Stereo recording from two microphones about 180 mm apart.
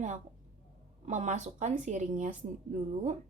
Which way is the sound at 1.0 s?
40° right (ahead or behind).